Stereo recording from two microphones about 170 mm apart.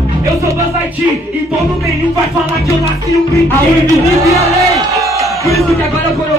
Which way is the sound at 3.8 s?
20° right (ahead or behind).